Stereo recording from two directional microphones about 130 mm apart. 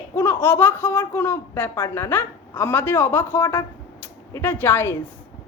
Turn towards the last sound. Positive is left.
turn(degrees=15)  # may be behind; listen again after turning